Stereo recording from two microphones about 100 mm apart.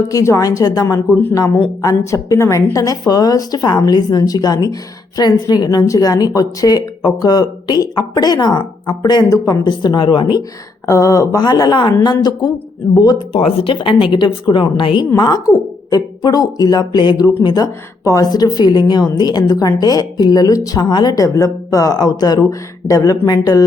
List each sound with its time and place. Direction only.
0.1 s a woman's voice: 35° left (ahead or behind)
9.3 s a woman's voice: 35° left (ahead or behind)
9.6 s speech: 50° left (ahead or behind)
10.8 s a woman's voice: 35° left (ahead or behind)
13.3 s a woman's voice: 75° left (ahead or behind); by 15.0 s 55° left (ahead or behind)
15.1 s a woman's voice: 40° left (ahead or behind)